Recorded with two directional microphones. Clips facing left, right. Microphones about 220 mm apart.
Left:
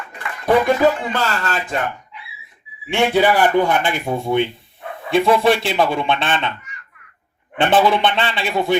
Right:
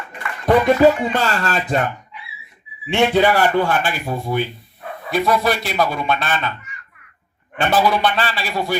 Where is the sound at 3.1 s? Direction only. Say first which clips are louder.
Left 2 dB; 15° left (ahead or behind).